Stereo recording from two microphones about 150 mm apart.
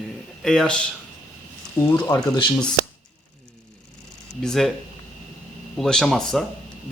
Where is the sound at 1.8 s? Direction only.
20° left (ahead or behind).